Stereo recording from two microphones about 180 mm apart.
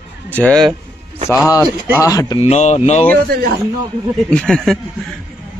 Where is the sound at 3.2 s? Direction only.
55° right (ahead or behind).